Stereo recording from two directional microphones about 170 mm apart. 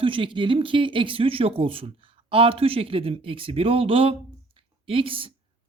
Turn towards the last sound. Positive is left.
turn(degrees=-30)  # may be behind; listen again after turning